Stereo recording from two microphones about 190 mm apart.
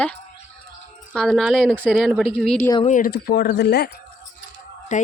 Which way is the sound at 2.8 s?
45° left (ahead or behind).